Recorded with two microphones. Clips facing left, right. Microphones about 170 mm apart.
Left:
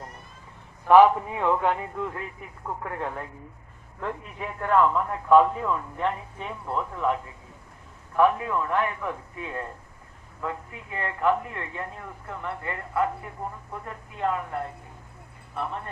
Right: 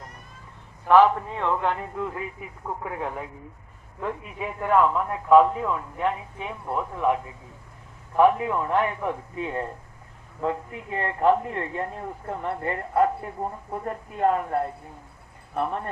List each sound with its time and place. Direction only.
0.9 s a man's voice: 10° left (ahead or behind); by 14.6 s 45° right (ahead or behind)